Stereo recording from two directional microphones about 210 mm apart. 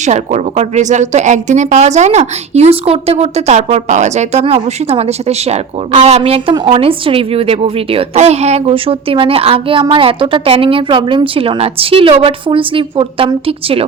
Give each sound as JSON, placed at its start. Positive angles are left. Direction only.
{"t": 0.0, "sound": "speech", "side_deg": -35}